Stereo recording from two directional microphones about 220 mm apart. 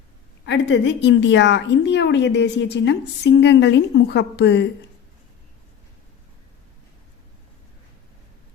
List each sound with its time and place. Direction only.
0.4 s a woman's voice: 55° left (ahead or behind)